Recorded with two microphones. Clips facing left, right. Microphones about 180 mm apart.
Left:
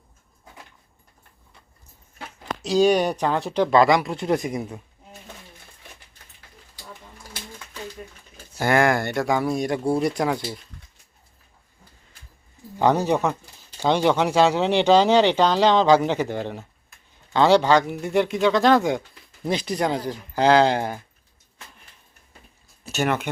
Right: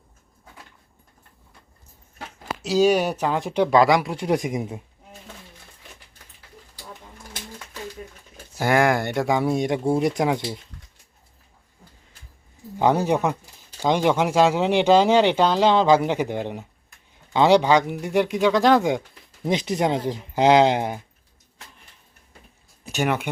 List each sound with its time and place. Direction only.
2.6 s speech: 5° right (ahead or behind)
8.5 s speech: 10° right (ahead or behind)
12.8 s speech: 10° right (ahead or behind)
22.8 s speech: 15° right (ahead or behind)